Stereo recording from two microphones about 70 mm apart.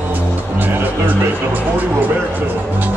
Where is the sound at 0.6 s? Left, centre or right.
Right.